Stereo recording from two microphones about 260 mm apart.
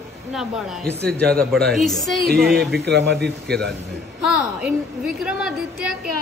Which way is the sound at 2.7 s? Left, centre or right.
Right.